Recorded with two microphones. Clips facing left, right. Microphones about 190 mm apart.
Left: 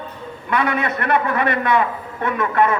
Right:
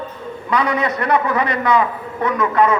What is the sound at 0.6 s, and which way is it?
Speech, 55° left (ahead or behind).